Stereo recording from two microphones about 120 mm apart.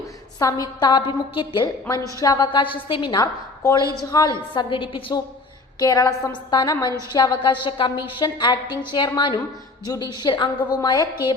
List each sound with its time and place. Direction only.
0.3 s a woman's voice: 30° left (ahead or behind)
2.1 s a woman's voice: 30° left (ahead or behind)
5.8 s a woman's voice: 30° left (ahead or behind)